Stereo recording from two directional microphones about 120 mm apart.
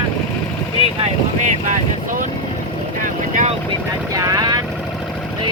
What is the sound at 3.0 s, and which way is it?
Vehicle, 90° right.